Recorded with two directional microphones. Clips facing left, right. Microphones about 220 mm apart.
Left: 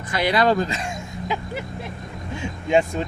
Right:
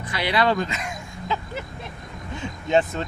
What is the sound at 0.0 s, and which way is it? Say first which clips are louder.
Speech: left 3 dB; 45° left (ahead or behind).